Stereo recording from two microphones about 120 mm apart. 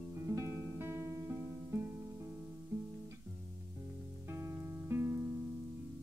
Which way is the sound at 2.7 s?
25° right (ahead or behind).